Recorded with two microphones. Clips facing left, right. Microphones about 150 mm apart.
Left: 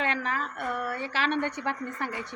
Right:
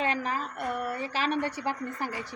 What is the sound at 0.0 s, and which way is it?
Speech, 35° right (ahead or behind).